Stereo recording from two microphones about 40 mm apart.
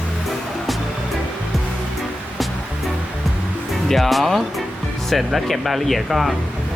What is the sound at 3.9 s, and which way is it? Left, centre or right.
Speech, centre.